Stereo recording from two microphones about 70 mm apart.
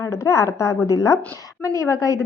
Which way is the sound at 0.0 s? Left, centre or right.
Left.